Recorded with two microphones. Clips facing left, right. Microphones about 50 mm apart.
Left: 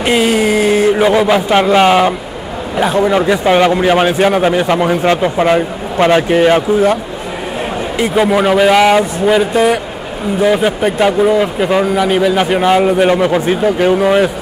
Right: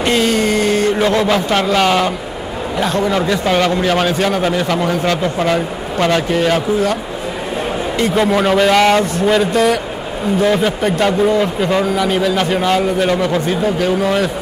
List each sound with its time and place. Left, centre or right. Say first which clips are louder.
0.0 s a man's voice: left 3 dB; centre
8.0 s a man's voice: left 3 dB; centre